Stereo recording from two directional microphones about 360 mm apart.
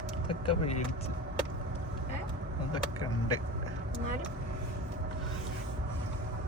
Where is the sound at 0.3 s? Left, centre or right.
Centre.